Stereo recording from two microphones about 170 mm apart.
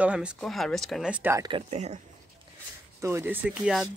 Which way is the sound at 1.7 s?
40° right (ahead or behind).